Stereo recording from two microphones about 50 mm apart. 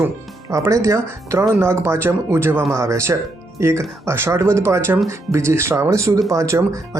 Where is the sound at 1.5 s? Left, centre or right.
Right.